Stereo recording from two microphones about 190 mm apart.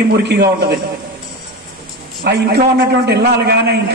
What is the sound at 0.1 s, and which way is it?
Speech, 60° right (ahead or behind).